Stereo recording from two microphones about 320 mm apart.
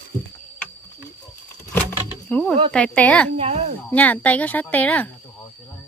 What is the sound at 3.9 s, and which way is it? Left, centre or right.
Speech, centre.